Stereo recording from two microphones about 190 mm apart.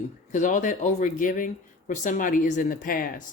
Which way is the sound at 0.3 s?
40° left (ahead or behind).